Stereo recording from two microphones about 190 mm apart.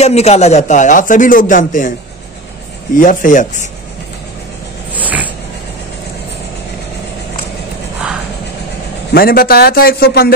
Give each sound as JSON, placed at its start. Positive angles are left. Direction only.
{"t": 0.0, "sound": "speech", "side_deg": 35}
{"t": 3.0, "sound": "a man's voice", "side_deg": 45}
{"t": 4.9, "sound": "a sound", "side_deg": -10}
{"t": 9.1, "sound": "a man's voice", "side_deg": 50}